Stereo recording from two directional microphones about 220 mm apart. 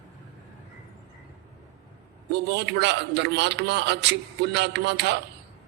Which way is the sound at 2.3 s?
50° right (ahead or behind).